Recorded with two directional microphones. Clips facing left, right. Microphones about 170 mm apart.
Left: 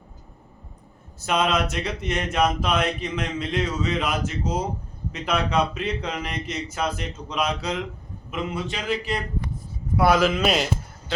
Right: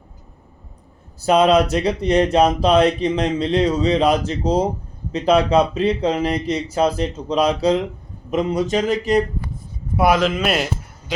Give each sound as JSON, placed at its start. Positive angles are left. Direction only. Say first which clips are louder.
{"t": 1.2, "sound": "speech", "louder": "right 9 dB", "side_deg": -35}
{"t": 10.1, "sound": "speech", "louder": "right 2 dB", "side_deg": 0}